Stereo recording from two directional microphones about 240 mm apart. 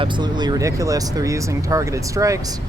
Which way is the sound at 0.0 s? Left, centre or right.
Centre.